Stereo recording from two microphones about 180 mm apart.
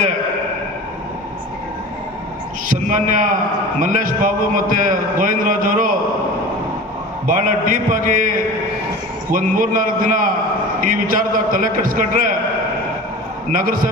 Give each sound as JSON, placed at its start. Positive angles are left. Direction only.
{"t": 2.7, "sound": "a man's voice", "side_deg": -45}
{"t": 7.2, "sound": "a man's voice", "side_deg": -45}
{"t": 13.5, "sound": "a man's voice", "side_deg": -50}